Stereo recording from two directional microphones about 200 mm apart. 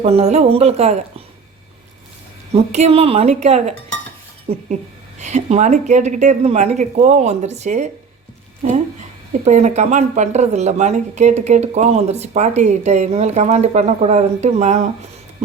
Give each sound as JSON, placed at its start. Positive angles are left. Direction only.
{"t": 0.0, "sound": "speech", "side_deg": -30}
{"t": 2.7, "sound": "speech", "side_deg": -30}
{"t": 9.4, "sound": "speech", "side_deg": -35}